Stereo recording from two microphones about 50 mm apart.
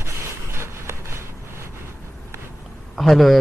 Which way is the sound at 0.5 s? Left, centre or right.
Right.